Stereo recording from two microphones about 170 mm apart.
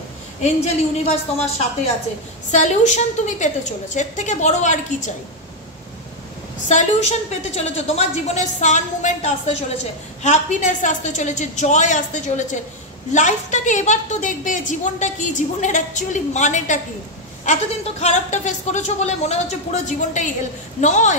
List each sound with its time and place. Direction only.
0.4 s a woman's voice: 40° left (ahead or behind)
2.5 s a woman's voice: 45° left (ahead or behind)
6.7 s a woman's voice: 40° left (ahead or behind)